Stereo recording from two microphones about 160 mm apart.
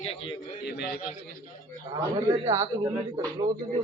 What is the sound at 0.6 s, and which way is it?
Speech, 80° left.